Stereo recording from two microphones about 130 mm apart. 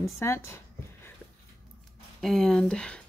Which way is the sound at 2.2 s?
5° left (ahead or behind).